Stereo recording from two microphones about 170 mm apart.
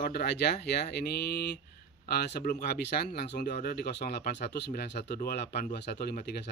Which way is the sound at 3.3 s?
70° left (ahead or behind).